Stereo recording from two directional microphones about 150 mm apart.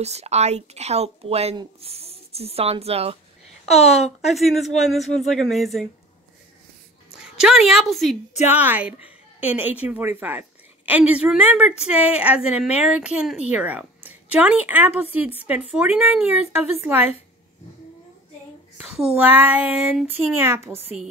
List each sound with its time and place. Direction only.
0.0 s a woman's voice: 45° right (ahead or behind)
3.7 s a woman's voice: 45° left (ahead or behind)
4.3 s a woman's voice: centre (ahead or behind)
7.2 s a woman's voice: 5° right (ahead or behind)
8.5 s speech: 10° right (ahead or behind)
18.8 s speech: 5° right (ahead or behind)